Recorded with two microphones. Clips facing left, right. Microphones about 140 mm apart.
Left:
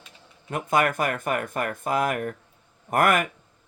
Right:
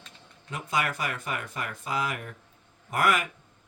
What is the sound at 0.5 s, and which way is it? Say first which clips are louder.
Speech: left 7 dB; 50° left (ahead or behind).